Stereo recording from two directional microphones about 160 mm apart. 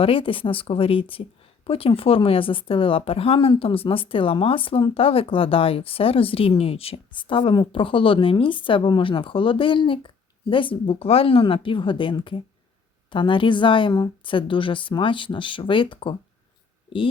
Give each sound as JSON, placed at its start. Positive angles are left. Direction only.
{"t": 0.0, "sound": "speech", "side_deg": 35}